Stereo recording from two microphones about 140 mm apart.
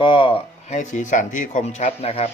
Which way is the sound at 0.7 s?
60° left (ahead or behind).